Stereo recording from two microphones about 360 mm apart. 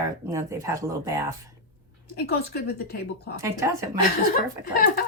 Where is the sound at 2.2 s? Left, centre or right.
Left.